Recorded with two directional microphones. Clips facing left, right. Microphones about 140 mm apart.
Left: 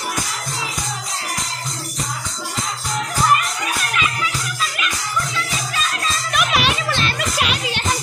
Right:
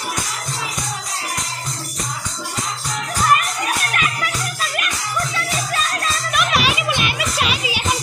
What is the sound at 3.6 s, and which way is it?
Music, 50° right (ahead or behind).